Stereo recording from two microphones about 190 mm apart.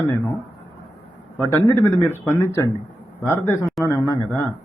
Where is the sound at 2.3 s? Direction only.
15° left (ahead or behind).